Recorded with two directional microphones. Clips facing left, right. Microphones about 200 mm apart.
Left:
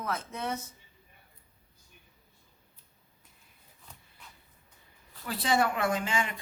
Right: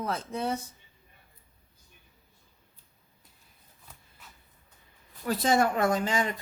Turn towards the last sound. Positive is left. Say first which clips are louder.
# right 4 dB
turn(degrees=-40)  # may be behind; listen again after turning